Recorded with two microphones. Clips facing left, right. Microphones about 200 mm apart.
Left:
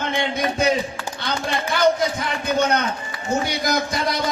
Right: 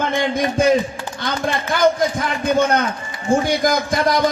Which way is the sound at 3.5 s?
50° right (ahead or behind).